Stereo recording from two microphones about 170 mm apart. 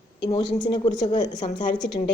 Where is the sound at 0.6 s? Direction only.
25° left (ahead or behind).